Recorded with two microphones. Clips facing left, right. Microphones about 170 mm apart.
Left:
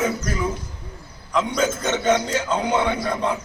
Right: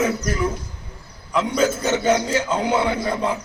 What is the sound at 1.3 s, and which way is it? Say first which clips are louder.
A man's voice: right 2 dB; 5° right (ahead or behind).